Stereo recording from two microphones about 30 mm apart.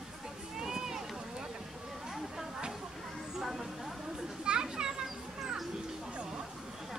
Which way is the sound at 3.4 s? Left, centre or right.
Centre.